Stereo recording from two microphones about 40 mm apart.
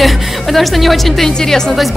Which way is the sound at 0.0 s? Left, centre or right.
Centre.